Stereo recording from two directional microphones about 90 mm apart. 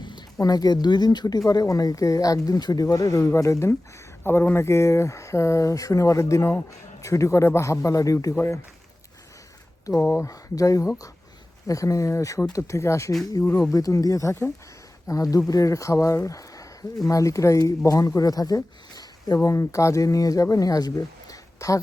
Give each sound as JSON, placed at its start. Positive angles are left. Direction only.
{"t": 0.0, "sound": "a sound", "side_deg": 60}
{"t": 0.3, "sound": "speech", "side_deg": 45}
{"t": 9.9, "sound": "speech", "side_deg": 15}
{"t": 10.2, "sound": "speech", "side_deg": 40}
{"t": 13.7, "sound": "speech", "side_deg": 40}